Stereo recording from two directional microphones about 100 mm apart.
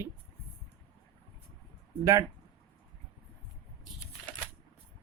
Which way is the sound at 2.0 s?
30° right (ahead or behind).